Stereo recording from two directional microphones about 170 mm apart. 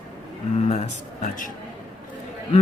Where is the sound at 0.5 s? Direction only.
40° left (ahead or behind).